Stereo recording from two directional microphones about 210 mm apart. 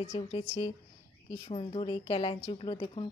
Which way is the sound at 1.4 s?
25° left (ahead or behind).